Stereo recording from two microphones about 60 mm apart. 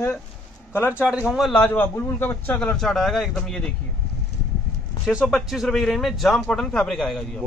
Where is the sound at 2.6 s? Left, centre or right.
Centre.